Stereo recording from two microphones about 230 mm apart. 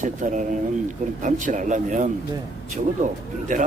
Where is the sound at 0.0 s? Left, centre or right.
Right.